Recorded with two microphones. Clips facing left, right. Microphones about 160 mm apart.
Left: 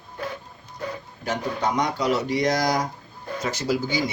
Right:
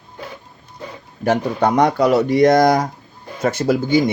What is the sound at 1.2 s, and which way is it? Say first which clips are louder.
Speech: right 9 dB; 60° right (ahead or behind).